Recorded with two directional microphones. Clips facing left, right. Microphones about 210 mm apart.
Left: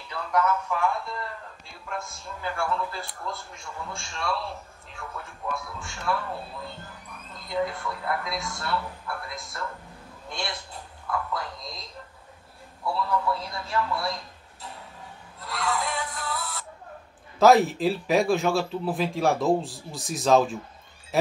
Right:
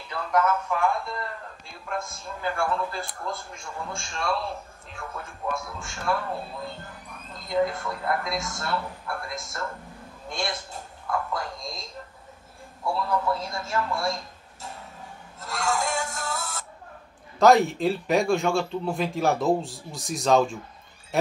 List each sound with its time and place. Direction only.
0.1 s a man's voice: 50° right (ahead or behind)
7.4 s a man's voice: 45° right (ahead or behind)
15.4 s music: 45° right (ahead or behind)
17.4 s a man's voice: centre (ahead or behind)